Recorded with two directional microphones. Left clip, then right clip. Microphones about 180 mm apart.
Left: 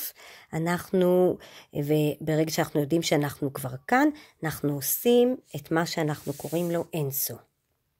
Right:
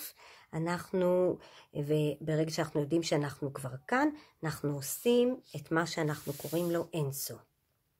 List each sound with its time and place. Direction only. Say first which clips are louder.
0.0 s speech: left 7 dB; 45° left (ahead or behind)